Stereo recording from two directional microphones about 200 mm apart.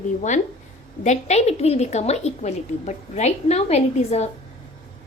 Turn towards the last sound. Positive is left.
turn(degrees=30)  # may be behind; listen again after turning